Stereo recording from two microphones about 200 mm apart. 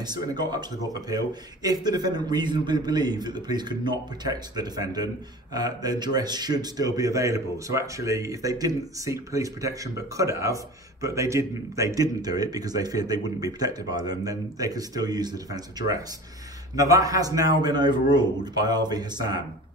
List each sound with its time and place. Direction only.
0.0 s speech: 20° right (ahead or behind)